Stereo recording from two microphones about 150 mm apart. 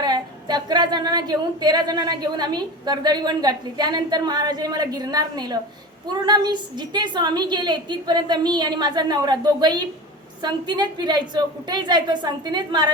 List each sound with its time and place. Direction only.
0.0 s a woman's voice: 30° right (ahead or behind)